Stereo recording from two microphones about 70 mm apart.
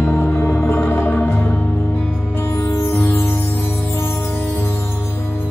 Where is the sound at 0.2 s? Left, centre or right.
Left.